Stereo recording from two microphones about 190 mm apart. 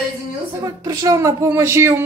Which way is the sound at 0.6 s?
15° right (ahead or behind).